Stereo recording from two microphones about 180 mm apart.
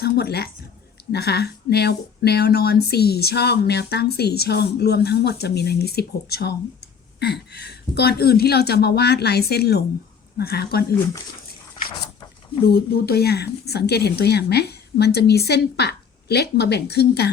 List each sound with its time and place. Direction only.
0.0 s a woman's voice: 65° left (ahead or behind)
12.6 s speech: 60° left (ahead or behind)